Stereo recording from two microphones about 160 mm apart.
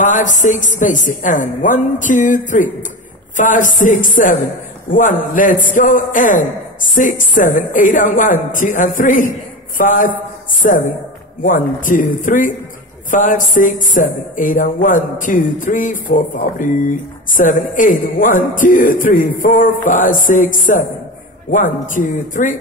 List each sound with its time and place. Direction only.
0.0 s a woman's voice: 50° left (ahead or behind)
9.8 s a sound: 60° left (ahead or behind)
11.4 s speech: 55° left (ahead or behind)